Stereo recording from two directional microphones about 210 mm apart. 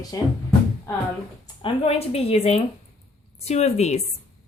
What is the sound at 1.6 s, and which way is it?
A woman's voice, 30° left (ahead or behind).